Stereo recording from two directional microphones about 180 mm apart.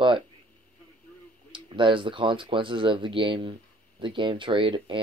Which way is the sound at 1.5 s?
30° right (ahead or behind).